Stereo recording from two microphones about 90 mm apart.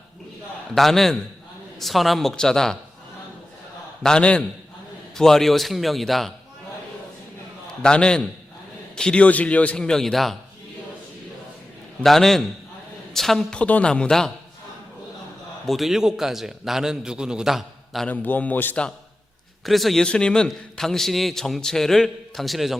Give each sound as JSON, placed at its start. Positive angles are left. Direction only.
{"t": 0.8, "sound": "a man's voice", "side_deg": 5}
{"t": 4.0, "sound": "a man's voice", "side_deg": 10}
{"t": 7.7, "sound": "a man's voice", "side_deg": 10}
{"t": 12.0, "sound": "a man's voice", "side_deg": 5}
{"t": 15.6, "sound": "a man's voice", "side_deg": 0}
{"t": 18.1, "sound": "a man's voice", "side_deg": 20}
{"t": 19.6, "sound": "a man's voice", "side_deg": 0}